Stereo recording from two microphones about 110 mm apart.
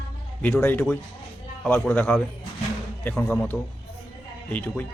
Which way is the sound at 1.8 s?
15° left (ahead or behind).